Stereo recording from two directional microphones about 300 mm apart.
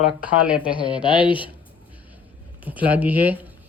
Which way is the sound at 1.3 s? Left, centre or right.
Centre.